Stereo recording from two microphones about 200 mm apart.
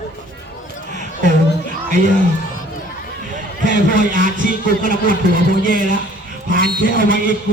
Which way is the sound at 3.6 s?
40° right (ahead or behind).